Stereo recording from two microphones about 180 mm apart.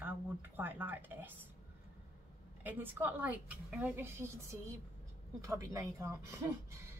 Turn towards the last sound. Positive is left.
turn(degrees=-15)  # may be behind; listen again after turning